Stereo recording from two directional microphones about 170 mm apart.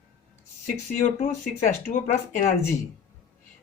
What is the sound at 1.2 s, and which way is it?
Speech, 45° left (ahead or behind).